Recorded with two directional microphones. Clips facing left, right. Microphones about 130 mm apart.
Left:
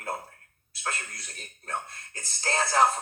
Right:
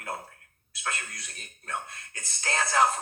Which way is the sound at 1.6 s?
30° left (ahead or behind).